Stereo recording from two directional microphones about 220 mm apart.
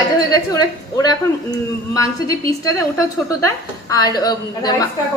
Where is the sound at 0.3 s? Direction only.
15° left (ahead or behind).